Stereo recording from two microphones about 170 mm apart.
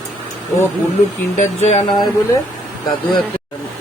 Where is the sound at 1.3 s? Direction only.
40° left (ahead or behind).